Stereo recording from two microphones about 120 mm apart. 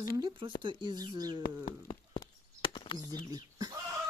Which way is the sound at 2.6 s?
45° left (ahead or behind).